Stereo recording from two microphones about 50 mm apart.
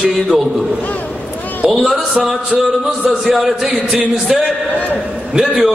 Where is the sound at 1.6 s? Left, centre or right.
Centre.